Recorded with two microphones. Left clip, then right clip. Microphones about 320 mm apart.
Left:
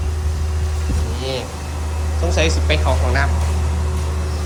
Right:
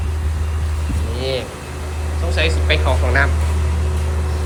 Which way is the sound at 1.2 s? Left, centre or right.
Centre.